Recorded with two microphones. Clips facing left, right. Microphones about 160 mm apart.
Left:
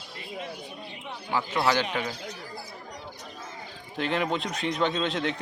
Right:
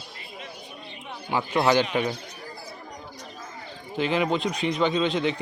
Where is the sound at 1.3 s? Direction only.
20° right (ahead or behind).